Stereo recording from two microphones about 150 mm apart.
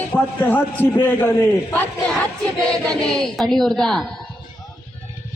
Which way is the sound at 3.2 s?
Centre (ahead or behind).